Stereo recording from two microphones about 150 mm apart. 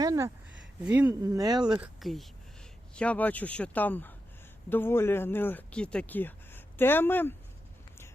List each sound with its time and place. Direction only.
0.0 s a sound: 25° right (ahead or behind)
1.2 s speech: 25° right (ahead or behind)
1.8 s speech: centre (ahead or behind)